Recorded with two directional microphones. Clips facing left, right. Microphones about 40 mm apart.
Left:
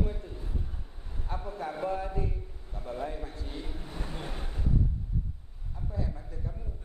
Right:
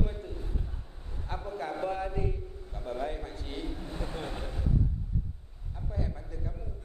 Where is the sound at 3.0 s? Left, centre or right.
Right.